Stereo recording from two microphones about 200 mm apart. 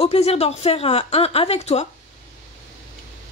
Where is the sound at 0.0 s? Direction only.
30° left (ahead or behind).